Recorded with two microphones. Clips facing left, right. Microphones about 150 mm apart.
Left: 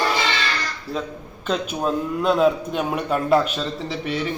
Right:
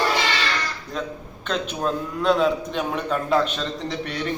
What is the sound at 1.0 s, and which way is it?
A man's voice, 5° left (ahead or behind).